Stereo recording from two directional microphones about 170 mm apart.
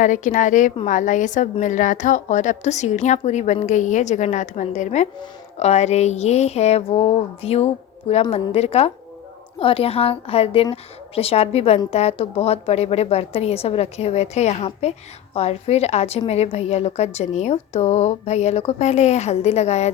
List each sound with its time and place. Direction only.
0.0 s a woman's voice: 45° left (ahead or behind)